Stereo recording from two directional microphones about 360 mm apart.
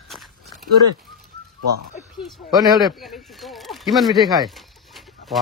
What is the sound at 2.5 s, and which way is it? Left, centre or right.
Speech, centre.